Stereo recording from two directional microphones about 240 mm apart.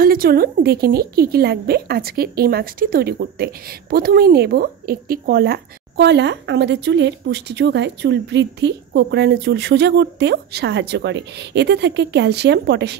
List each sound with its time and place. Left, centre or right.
0.0 s a woman's voice: right